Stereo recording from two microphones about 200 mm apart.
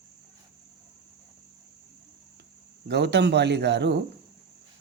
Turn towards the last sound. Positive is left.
turn(degrees=-60)  # may be behind; listen again after turning